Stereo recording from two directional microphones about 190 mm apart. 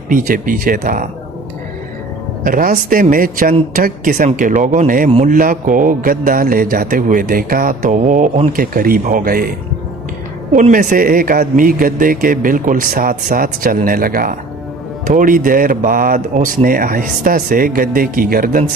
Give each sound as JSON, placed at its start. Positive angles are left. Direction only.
{"t": 0.1, "sound": "a man's voice", "side_deg": -45}
{"t": 2.4, "sound": "a man's voice", "side_deg": -45}
{"t": 10.5, "sound": "a man's voice", "side_deg": -45}